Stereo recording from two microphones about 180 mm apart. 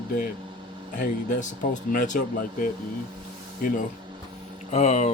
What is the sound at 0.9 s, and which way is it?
Speech, 45° left (ahead or behind).